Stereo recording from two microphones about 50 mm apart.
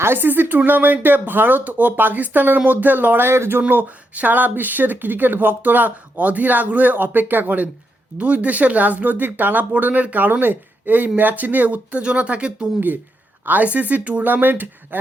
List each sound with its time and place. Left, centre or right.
0.0 s speech: right
3.2 s speech: right
3.7 s speech: right
13.4 s speech: right